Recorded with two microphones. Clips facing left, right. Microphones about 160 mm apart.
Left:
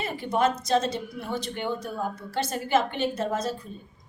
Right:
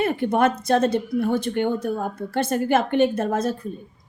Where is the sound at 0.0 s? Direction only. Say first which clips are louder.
Right 5 dB; 55° right (ahead or behind).